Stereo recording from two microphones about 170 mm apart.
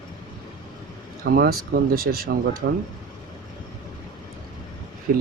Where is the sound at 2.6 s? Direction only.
80° right.